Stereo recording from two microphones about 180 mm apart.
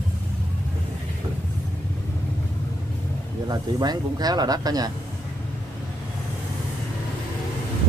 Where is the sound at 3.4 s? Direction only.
20° right (ahead or behind).